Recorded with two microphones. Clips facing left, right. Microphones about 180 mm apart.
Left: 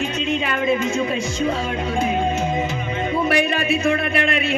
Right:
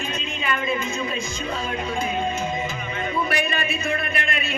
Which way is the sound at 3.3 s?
75° left (ahead or behind).